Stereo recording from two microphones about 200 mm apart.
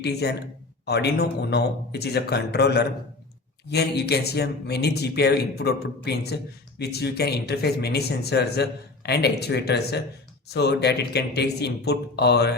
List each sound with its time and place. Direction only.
0.0 s speech: 55° left (ahead or behind)